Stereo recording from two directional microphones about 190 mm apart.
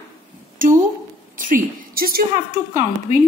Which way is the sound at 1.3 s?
45° right (ahead or behind).